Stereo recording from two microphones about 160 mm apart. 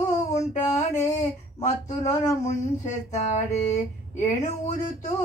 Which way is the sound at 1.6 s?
45° left (ahead or behind).